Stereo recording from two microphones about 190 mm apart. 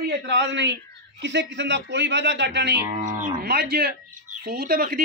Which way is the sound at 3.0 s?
45° right (ahead or behind).